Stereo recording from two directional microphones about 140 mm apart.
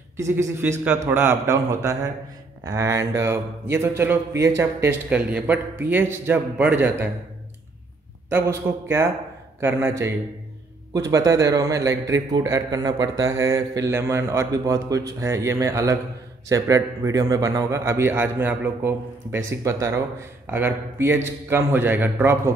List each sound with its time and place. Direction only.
0.2 s a man's voice: 20° right (ahead or behind)
8.3 s a man's voice: 15° right (ahead or behind)